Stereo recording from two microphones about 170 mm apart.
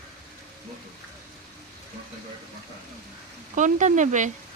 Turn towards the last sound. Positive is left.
turn(degrees=-45)  # may be behind; listen again after turning